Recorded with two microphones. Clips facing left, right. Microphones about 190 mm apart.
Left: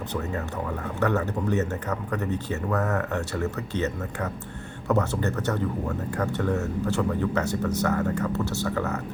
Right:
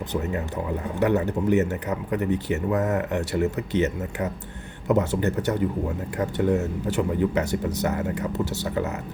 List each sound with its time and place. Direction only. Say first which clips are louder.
0.9 s speech: right 3 dB; 15° right (ahead or behind)